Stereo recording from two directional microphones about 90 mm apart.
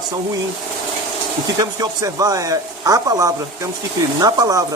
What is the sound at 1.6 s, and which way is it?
Speech, 40° right (ahead or behind).